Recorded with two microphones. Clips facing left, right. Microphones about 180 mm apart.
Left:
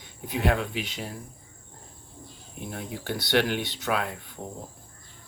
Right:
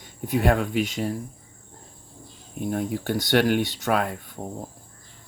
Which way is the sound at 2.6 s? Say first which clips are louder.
Right 9 dB; 45° right (ahead or behind).